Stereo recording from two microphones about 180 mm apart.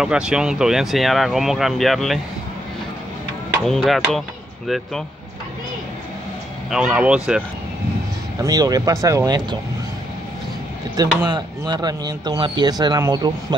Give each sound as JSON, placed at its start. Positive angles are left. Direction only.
{"t": 0.0, "sound": "speech", "side_deg": -5}
{"t": 3.6, "sound": "speech", "side_deg": 0}
{"t": 6.7, "sound": "speech", "side_deg": -5}
{"t": 8.4, "sound": "speech", "side_deg": -20}
{"t": 11.0, "sound": "speech", "side_deg": -25}